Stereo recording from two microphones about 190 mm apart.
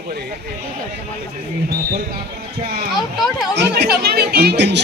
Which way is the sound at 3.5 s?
60° right (ahead or behind).